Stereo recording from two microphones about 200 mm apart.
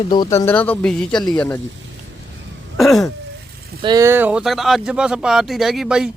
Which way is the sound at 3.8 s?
20° right (ahead or behind).